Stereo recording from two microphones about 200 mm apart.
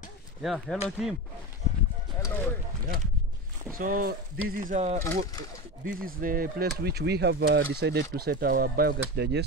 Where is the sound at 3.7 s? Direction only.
45° right (ahead or behind).